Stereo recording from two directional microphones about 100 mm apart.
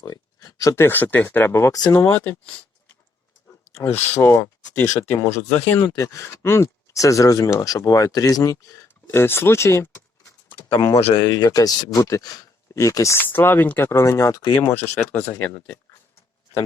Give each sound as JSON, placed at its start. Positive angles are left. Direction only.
{"t": 0.0, "sound": "a sound", "side_deg": 40}
{"t": 0.8, "sound": "speech", "side_deg": 20}
{"t": 3.8, "sound": "speech", "side_deg": 25}
{"t": 5.8, "sound": "speech", "side_deg": 35}
{"t": 9.0, "sound": "speech", "side_deg": 25}
{"t": 10.8, "sound": "speech", "side_deg": 40}
{"t": 14.6, "sound": "speech", "side_deg": 20}